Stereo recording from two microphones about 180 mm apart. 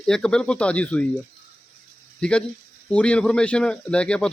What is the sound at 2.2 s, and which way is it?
A man's voice, 5° left (ahead or behind).